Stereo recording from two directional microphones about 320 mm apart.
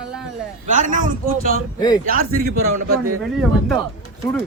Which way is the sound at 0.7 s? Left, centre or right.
Right.